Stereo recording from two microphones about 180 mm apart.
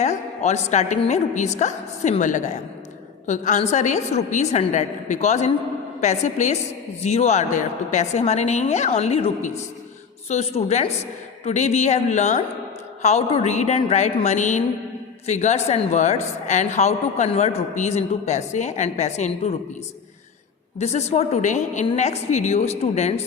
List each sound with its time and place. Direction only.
0.0 s a woman's voice: 40° left (ahead or behind)
20.7 s a woman's voice: 35° left (ahead or behind)